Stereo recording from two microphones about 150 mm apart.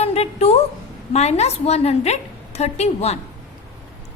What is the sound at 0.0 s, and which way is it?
A woman's voice, 45° left (ahead or behind).